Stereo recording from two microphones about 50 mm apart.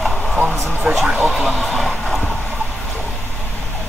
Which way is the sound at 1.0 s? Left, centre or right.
Right.